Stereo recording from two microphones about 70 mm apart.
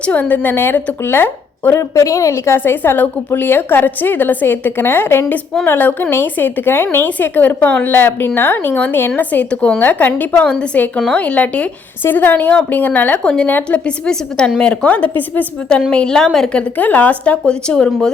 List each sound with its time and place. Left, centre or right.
0.0 s a woman's voice: left
2.0 s a woman's voice: left
13.2 s a woman's voice: centre
14.8 s a woman's voice: left
15.9 s a woman's voice: centre